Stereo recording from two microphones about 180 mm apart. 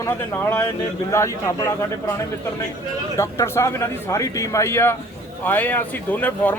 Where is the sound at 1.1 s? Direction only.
15° left (ahead or behind).